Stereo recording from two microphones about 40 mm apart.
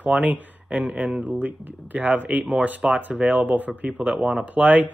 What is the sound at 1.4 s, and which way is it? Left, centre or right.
Speech, right.